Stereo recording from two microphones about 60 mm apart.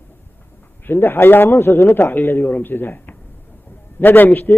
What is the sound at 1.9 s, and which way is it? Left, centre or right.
Speech, left.